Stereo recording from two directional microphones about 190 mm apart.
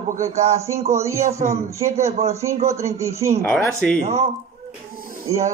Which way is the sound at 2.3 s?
15° right (ahead or behind).